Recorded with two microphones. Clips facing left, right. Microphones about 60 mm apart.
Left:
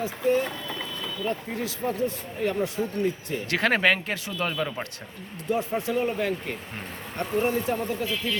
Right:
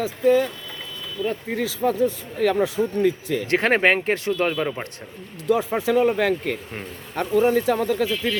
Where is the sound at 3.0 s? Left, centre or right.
Right.